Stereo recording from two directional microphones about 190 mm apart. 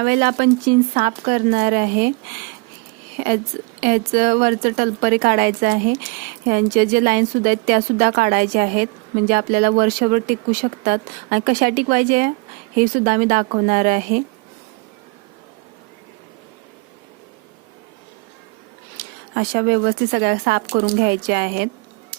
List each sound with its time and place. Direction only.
0.0 s speech: 60° right (ahead or behind)
3.2 s speech: 55° right (ahead or behind)
18.9 s speech: 55° right (ahead or behind)